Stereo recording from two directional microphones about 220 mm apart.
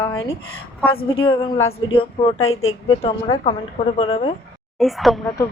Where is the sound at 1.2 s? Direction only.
20° left (ahead or behind).